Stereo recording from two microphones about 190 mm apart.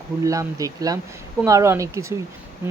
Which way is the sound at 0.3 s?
15° right (ahead or behind).